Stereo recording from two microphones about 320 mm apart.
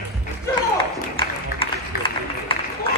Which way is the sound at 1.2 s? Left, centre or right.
Centre.